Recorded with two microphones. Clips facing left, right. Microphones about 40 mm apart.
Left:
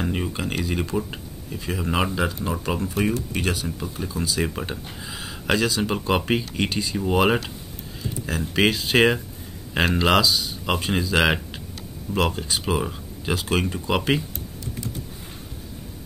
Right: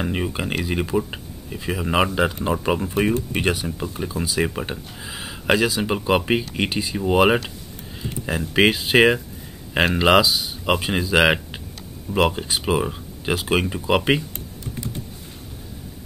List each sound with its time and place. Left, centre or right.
0.0 s speech: centre